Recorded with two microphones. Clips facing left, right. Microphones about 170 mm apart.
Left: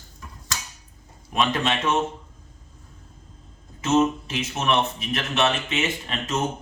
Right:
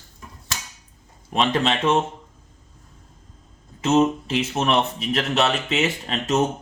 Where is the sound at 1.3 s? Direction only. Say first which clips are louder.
Right 2 dB; 30° right (ahead or behind).